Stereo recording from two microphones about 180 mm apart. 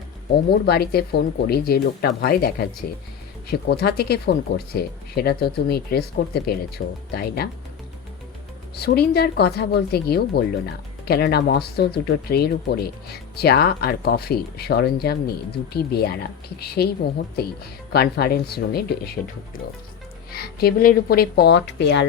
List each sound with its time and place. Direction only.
0.6 s speech: 60° left (ahead or behind)
8.7 s speech: 60° left (ahead or behind)
17.9 s speech: 60° left (ahead or behind)